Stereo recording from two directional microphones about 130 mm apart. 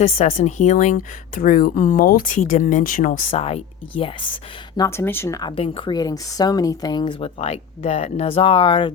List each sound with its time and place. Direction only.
0.0 s a woman's voice: 50° left (ahead or behind); by 3.2 s 90° left
3.3 s speech: 50° left (ahead or behind)
4.8 s speech: 20° left (ahead or behind)
5.5 s speech: 45° left (ahead or behind)
7.4 s speech: 50° left (ahead or behind)